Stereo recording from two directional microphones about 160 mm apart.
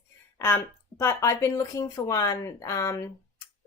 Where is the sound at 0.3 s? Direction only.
15° left (ahead or behind).